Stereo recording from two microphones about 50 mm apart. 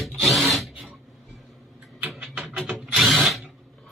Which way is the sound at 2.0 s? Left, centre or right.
Right.